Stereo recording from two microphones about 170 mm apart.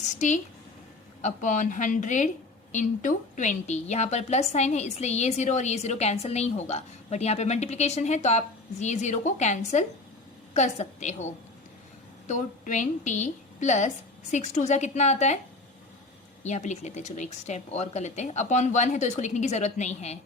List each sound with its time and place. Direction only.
0.0 s a woman's voice: 45° left (ahead or behind)
12.3 s speech: 45° left (ahead or behind)
16.4 s speech: 40° left (ahead or behind)